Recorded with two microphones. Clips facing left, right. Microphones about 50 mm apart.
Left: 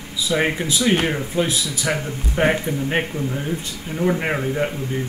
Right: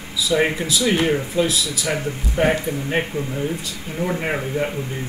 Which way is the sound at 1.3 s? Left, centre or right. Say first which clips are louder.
Right 1 dB; left.